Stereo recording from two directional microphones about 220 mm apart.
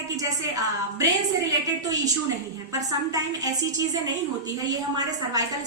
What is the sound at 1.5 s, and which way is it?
Speech, 15° right (ahead or behind).